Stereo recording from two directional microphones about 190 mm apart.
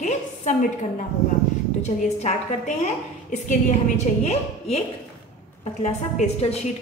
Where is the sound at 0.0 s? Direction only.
40° left (ahead or behind).